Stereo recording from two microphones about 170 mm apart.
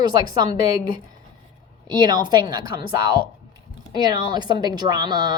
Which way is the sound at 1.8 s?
25° right (ahead or behind).